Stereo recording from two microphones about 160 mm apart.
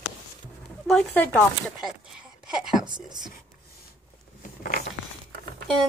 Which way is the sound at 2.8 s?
30° right (ahead or behind).